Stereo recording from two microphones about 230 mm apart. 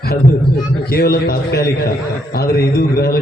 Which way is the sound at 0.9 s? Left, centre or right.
Left.